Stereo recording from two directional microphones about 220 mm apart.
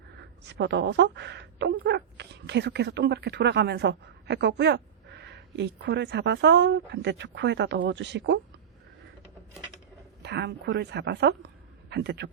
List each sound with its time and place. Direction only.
0.2 s a woman's voice: 50° right (ahead or behind)
10.2 s a woman's voice: 50° right (ahead or behind)